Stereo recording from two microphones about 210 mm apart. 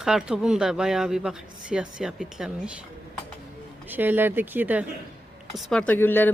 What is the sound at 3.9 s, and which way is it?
A woman's voice, 10° right (ahead or behind).